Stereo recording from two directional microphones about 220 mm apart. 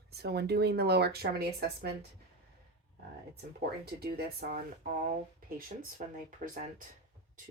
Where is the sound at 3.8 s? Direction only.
45° right (ahead or behind).